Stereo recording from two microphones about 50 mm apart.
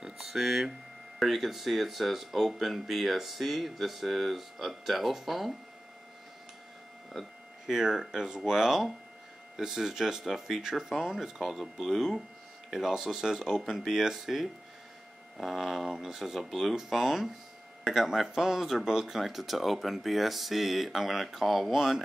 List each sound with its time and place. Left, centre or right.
0.0 s a sound: centre
1.2 s speech: centre
7.6 s speech: centre